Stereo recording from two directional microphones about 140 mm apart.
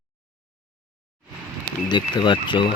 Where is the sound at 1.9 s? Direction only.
35° left (ahead or behind).